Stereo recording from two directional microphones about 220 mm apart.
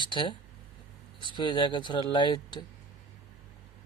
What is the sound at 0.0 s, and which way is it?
Speech, 20° left (ahead or behind).